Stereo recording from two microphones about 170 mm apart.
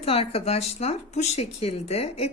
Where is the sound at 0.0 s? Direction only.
35° left (ahead or behind).